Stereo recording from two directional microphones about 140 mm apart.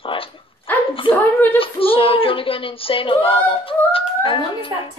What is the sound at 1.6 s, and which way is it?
Speech, 40° left (ahead or behind).